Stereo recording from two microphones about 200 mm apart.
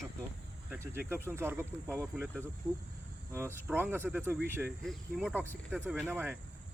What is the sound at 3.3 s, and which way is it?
Speech, 10° right (ahead or behind).